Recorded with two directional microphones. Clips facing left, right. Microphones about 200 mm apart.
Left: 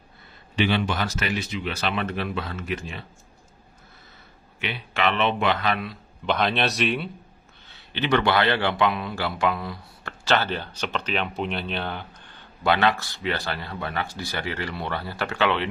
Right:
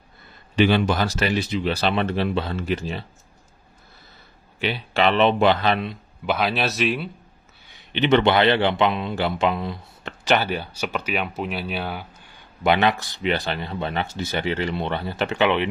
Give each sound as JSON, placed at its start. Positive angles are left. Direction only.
{"t": 0.6, "sound": "speech", "side_deg": -40}
{"t": 4.6, "sound": "speech", "side_deg": -35}
{"t": 6.2, "sound": "speech", "side_deg": -5}
{"t": 7.6, "sound": "speech", "side_deg": -15}
{"t": 12.6, "sound": "speech", "side_deg": -20}